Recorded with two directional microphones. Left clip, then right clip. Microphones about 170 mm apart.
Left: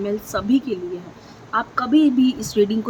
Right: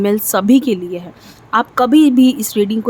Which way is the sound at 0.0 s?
60° right (ahead or behind).